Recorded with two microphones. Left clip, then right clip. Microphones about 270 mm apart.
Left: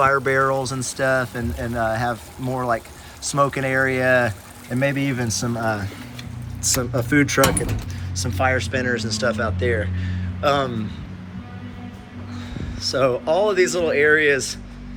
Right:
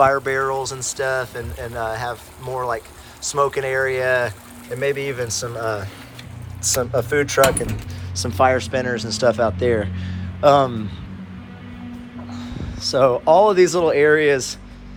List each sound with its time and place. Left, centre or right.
0.0 s speech: centre
12.4 s speech: centre